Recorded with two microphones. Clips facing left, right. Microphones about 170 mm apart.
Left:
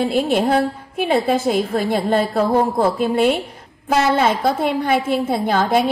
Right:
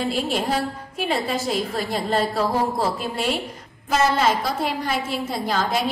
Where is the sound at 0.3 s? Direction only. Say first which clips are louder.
Left 7 dB; 55° left (ahead or behind).